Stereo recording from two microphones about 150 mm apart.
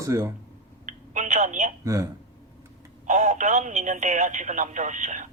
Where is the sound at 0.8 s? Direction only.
55° right (ahead or behind).